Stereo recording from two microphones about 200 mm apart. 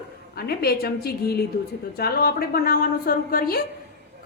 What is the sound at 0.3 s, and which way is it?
A woman's voice, 50° left (ahead or behind).